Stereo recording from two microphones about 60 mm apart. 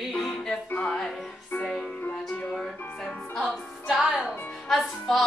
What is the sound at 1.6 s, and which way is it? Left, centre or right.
Music, centre.